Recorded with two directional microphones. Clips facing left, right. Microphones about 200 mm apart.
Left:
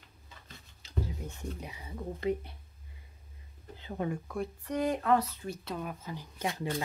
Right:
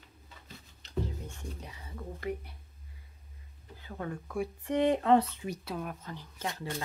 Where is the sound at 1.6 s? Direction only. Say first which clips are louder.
Left 3 dB; 10° left (ahead or behind).